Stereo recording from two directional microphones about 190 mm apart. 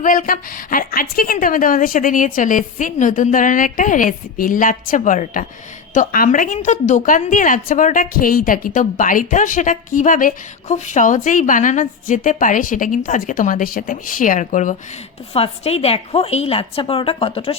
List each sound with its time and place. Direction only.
0.0 s a woman's voice: 45° left (ahead or behind)